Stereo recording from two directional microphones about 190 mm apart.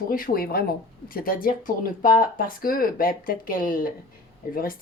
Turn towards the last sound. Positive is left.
turn(degrees=50)  # may be behind; listen again after turning